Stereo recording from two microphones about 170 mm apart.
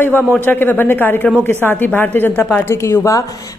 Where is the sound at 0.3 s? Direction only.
10° left (ahead or behind).